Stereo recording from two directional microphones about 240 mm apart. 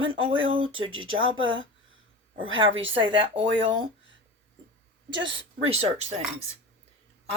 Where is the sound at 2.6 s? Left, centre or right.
Right.